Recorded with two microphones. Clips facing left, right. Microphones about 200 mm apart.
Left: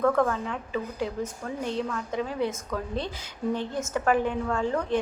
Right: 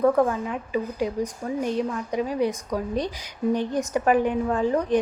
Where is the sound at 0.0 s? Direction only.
15° right (ahead or behind).